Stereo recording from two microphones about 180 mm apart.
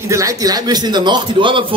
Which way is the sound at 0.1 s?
20° right (ahead or behind).